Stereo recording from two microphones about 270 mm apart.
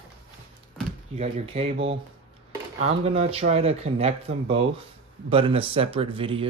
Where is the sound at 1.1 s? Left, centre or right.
Right.